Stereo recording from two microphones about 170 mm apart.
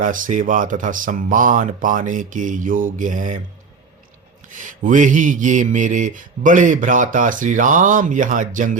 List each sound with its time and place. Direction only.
0.0 s mantra: 50° right (ahead or behind)
4.5 s mantra: 50° right (ahead or behind)